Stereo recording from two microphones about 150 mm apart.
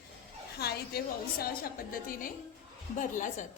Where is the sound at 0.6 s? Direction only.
85° left; by 2.3 s 70° left (ahead or behind).